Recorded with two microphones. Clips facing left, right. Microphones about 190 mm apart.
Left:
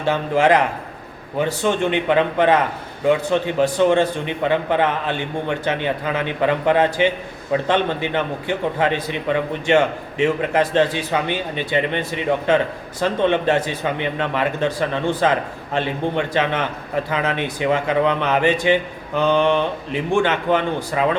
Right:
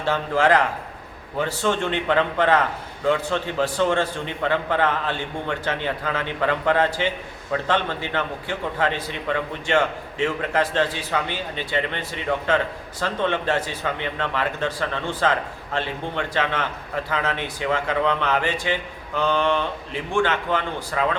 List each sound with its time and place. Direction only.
0.0 s a man's voice: 20° left (ahead or behind)